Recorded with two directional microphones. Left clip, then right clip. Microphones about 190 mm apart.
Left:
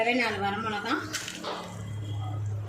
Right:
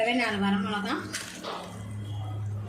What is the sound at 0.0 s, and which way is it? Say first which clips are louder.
Speech: even; 5° right (ahead or behind).